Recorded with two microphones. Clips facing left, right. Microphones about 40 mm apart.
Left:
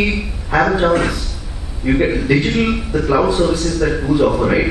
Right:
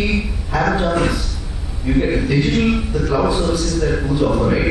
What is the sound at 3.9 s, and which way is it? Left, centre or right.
Speech, left.